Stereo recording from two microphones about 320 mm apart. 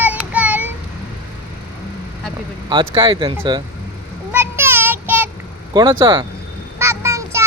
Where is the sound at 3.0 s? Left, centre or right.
Centre.